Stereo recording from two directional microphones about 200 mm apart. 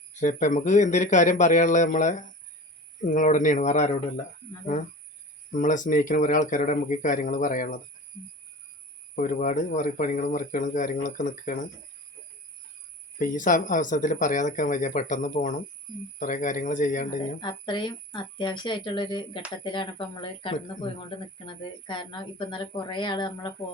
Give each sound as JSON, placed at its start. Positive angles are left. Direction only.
{"t": 0.1, "sound": "speech", "side_deg": 40}
{"t": 5.5, "sound": "speech", "side_deg": 40}
{"t": 9.1, "sound": "speech", "side_deg": 40}
{"t": 13.1, "sound": "speech", "side_deg": 40}
{"t": 17.4, "sound": "a woman's voice", "side_deg": 25}